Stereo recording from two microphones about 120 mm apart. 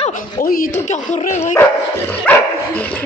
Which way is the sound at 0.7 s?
90° left.